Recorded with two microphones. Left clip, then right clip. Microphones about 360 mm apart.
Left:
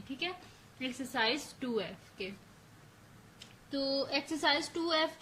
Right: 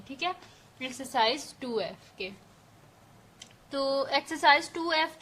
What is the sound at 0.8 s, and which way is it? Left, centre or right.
A woman's voice, centre.